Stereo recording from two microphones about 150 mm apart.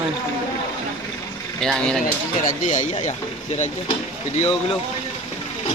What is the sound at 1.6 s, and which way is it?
Speech, centre (ahead or behind).